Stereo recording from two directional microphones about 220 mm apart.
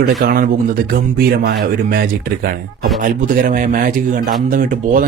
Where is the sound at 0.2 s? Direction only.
40° right (ahead or behind).